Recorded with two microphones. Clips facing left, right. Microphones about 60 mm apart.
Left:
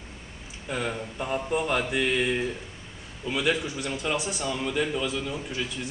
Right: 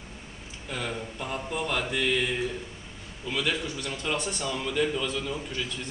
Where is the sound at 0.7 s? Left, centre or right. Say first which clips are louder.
Left 3 dB; centre.